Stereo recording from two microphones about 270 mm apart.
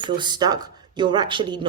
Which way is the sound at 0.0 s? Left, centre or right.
Centre.